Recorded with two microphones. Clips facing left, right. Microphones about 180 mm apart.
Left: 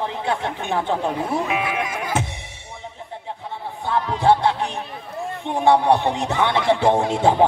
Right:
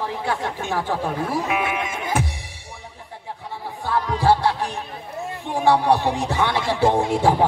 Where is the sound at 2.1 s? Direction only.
20° left (ahead or behind).